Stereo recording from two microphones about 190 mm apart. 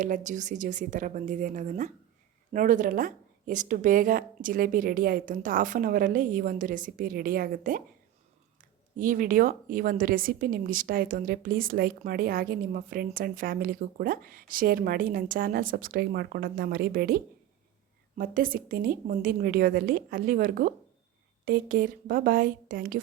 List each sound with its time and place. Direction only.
0.0 s a woman's voice: 40° right (ahead or behind)
9.0 s speech: 45° right (ahead or behind)